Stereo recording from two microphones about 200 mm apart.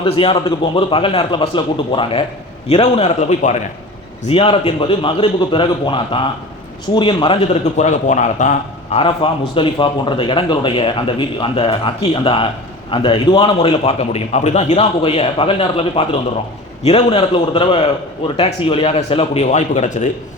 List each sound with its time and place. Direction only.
0.0 s a man's voice: 25° left (ahead or behind)